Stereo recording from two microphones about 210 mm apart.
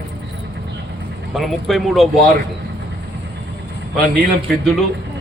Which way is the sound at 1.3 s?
Centre (ahead or behind).